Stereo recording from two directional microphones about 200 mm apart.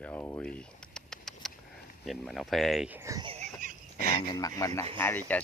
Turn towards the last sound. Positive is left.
turn(degrees=10)  # may be behind; listen again after turning